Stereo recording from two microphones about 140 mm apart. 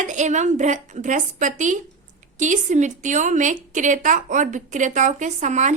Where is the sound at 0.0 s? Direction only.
60° right (ahead or behind).